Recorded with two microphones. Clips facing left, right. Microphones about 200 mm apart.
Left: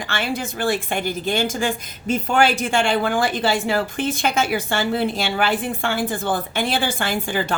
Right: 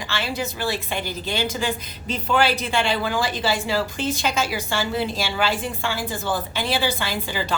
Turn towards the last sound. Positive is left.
turn(degrees=55)  # may be behind; listen again after turning